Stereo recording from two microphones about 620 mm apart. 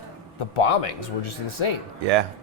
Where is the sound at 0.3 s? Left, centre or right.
Left.